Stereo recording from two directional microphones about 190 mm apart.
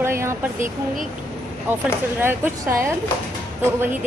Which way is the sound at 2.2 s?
10° right (ahead or behind).